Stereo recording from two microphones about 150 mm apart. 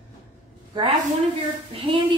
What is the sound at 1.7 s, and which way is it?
Speech, 35° right (ahead or behind).